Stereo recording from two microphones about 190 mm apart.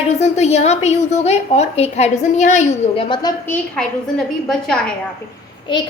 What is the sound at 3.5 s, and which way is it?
A woman's voice, 5° left (ahead or behind).